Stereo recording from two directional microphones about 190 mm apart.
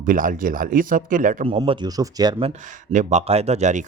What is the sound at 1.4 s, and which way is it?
Speech, 30° right (ahead or behind).